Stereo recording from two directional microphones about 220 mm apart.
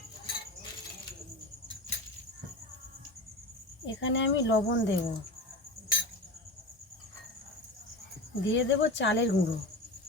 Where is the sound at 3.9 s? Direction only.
55° left (ahead or behind).